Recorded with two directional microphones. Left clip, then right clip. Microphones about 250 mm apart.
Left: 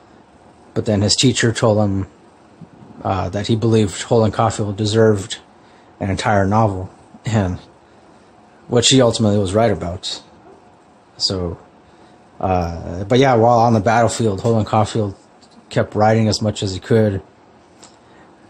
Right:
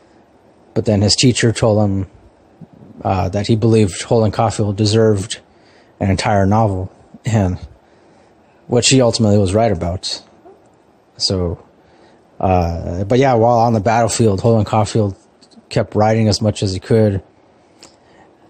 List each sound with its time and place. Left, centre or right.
0.7 s speech: centre
8.6 s speech: right